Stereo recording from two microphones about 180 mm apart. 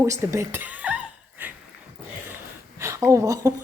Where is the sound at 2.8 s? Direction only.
15° right (ahead or behind).